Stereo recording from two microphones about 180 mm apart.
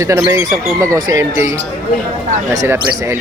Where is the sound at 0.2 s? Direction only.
15° right (ahead or behind).